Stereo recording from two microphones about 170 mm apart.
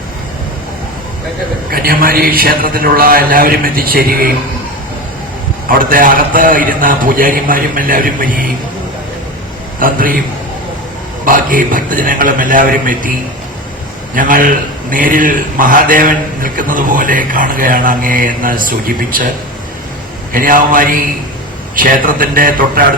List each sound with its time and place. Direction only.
1.7 s a man's voice: 60° right (ahead or behind)
5.6 s a man's voice: 55° right (ahead or behind)
9.8 s a man's voice: 55° right (ahead or behind)
11.3 s a man's voice: 55° right (ahead or behind)
14.2 s a man's voice: 55° right (ahead or behind)
20.3 s a man's voice: 55° right (ahead or behind)